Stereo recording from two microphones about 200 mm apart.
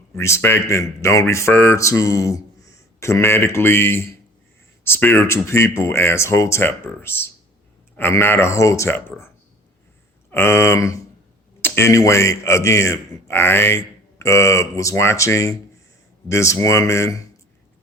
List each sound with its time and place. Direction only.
0.2 s speech: 15° left (ahead or behind)
10.3 s speech: 10° left (ahead or behind)